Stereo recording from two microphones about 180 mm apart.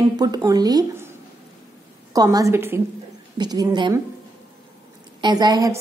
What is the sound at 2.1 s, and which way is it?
A woman's voice, 20° right (ahead or behind).